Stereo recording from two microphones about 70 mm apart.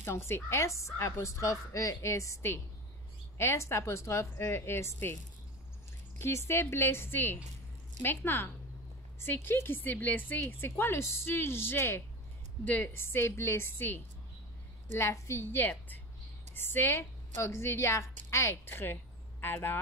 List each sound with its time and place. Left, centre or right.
0.0 s a woman's voice: left
18.5 s speech: left